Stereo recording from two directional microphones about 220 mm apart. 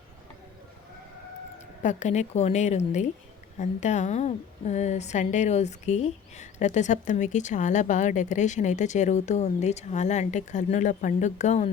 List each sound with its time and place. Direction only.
1.5 s a woman's voice: 35° left (ahead or behind)